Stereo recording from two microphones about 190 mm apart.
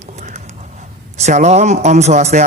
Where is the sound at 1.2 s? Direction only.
40° right (ahead or behind).